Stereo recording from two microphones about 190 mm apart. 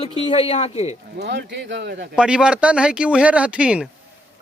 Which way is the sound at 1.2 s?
65° right (ahead or behind).